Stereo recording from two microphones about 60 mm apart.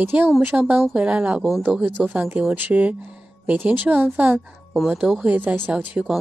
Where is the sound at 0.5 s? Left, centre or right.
Right.